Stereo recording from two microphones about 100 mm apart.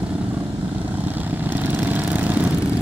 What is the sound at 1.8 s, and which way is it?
Vehicle, 15° right (ahead or behind).